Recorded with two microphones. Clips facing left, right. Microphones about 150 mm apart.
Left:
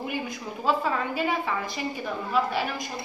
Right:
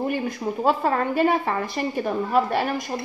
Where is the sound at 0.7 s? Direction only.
55° right (ahead or behind).